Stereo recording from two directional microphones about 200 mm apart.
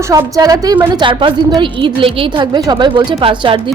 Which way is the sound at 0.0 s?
15° right (ahead or behind).